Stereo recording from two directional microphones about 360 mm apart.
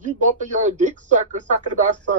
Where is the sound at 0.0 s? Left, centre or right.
Right.